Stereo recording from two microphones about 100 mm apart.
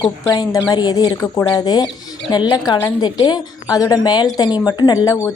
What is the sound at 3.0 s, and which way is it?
A woman's voice, 45° left (ahead or behind).